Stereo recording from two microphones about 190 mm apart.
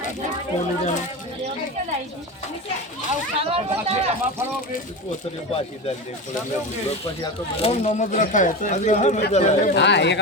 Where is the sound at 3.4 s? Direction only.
30° right (ahead or behind).